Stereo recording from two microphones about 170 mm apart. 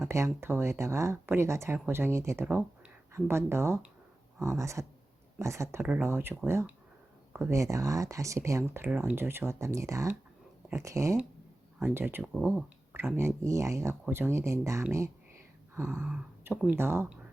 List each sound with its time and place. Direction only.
0.1 s speech: 15° right (ahead or behind)